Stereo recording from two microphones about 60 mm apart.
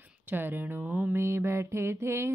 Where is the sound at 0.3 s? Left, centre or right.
Right.